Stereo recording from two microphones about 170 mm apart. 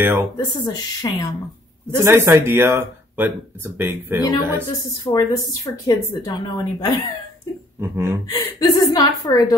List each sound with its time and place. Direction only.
0.0 s speech: 15° right (ahead or behind)
0.6 s speech: 20° left (ahead or behind)
2.0 s speech: 15° right (ahead or behind)
5.0 s speech: 20° left (ahead or behind)
7.8 s speech: 15° right (ahead or behind)
8.3 s speech: 25° left (ahead or behind)